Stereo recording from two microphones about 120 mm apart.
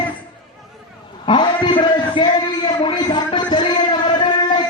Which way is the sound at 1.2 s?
40° left (ahead or behind).